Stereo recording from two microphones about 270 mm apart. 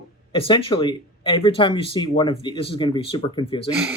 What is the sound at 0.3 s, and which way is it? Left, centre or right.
Speech, centre.